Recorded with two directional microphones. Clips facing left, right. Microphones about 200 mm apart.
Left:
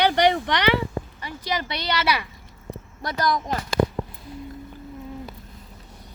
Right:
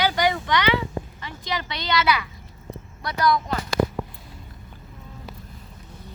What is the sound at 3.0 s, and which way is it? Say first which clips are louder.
Speech: right 2 dB; 45° left (ahead or behind).